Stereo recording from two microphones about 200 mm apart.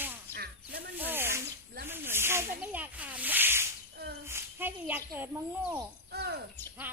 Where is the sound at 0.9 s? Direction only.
10° right (ahead or behind).